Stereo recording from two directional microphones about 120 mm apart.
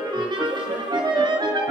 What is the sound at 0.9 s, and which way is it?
Music, 40° right (ahead or behind).